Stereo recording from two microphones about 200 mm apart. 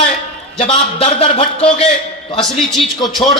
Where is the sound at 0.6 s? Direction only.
30° left (ahead or behind).